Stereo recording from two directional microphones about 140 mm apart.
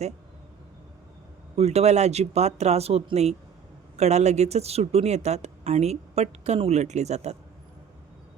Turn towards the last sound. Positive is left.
turn(degrees=-50)  # may be behind; listen again after turning